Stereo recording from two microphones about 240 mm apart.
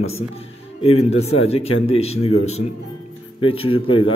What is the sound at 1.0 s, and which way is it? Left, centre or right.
A man's voice, left.